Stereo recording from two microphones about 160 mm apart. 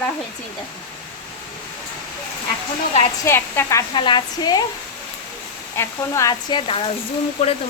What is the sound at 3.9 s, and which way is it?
Speech, 30° left (ahead or behind).